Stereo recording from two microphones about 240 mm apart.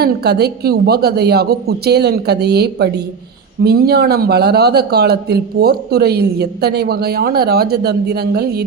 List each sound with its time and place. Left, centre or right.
0.0 s a woman's voice: right